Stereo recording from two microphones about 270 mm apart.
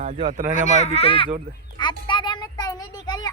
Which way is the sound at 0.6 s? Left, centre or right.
Left.